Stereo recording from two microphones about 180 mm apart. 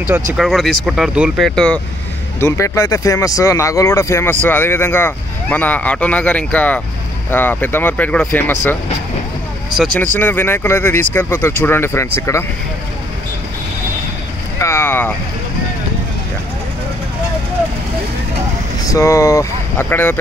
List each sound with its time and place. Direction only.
0.3 s speech: centre (ahead or behind)
1.5 s speech: 5° left (ahead or behind)
2.4 s speech: 15° left (ahead or behind)
10.1 s speech: 10° left (ahead or behind)
14.6 s vehicle: 15° left (ahead or behind)
18.9 s speech: 15° left (ahead or behind)